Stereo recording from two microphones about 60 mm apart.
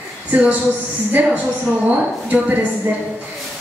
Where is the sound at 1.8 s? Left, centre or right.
Right.